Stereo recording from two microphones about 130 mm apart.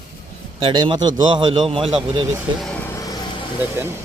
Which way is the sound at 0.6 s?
40° right (ahead or behind).